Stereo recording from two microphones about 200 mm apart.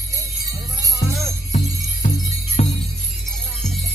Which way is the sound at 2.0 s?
35° left (ahead or behind).